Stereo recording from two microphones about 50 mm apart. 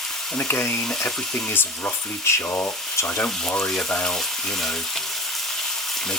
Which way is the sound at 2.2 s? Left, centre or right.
Left.